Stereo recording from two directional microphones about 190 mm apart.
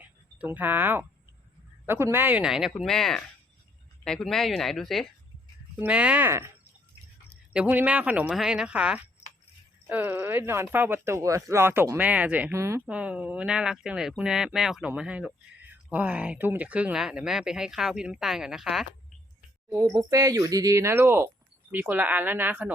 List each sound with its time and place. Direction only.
0.0 s speech: 10° right (ahead or behind)
19.7 s speech: 15° right (ahead or behind)